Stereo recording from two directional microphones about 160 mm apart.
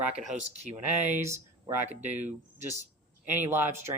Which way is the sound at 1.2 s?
15° right (ahead or behind).